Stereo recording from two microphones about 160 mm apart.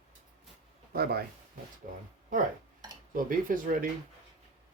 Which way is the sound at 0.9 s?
80° right.